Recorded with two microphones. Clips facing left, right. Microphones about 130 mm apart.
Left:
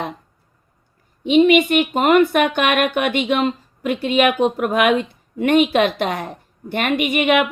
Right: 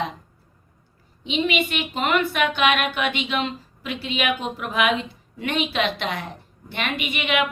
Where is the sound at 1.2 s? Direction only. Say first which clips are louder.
Left 11 dB; 50° left (ahead or behind).